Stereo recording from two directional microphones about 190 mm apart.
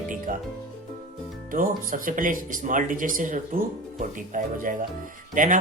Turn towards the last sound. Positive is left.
turn(degrees=-45)  # may be behind; listen again after turning